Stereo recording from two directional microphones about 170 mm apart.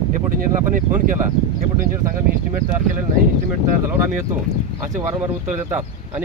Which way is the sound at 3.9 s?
15° right (ahead or behind).